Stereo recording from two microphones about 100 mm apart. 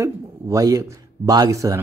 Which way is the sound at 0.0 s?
35° right (ahead or behind).